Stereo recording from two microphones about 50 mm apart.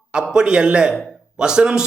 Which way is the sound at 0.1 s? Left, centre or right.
Centre.